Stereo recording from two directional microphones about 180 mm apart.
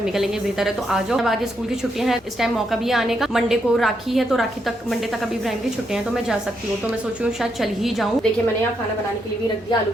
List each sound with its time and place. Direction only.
0.0 s a woman's voice: centre (ahead or behind)